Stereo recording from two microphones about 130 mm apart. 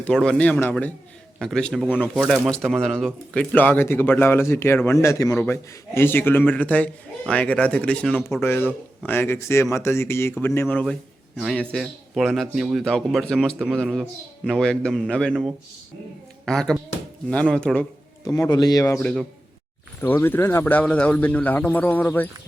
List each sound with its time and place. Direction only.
0.0 s a man's voice: 5° left (ahead or behind)
16.5 s a man's voice: 5° left (ahead or behind)
18.3 s speech: 30° left (ahead or behind)
20.0 s a man's voice: 15° left (ahead or behind)